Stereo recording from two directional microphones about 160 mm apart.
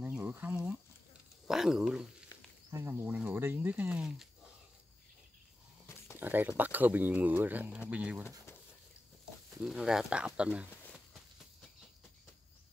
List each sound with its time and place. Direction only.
0.0 s a sound: 10° right (ahead or behind)
1.5 s speech: 5° right (ahead or behind)
2.7 s speech: 15° right (ahead or behind)
6.1 s speech: 10° right (ahead or behind)
9.6 s speech: 5° right (ahead or behind)